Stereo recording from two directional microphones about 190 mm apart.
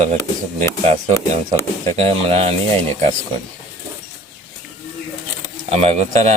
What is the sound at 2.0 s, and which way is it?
Speech, 30° right (ahead or behind).